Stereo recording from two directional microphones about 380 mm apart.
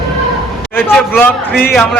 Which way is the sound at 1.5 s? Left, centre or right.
Left.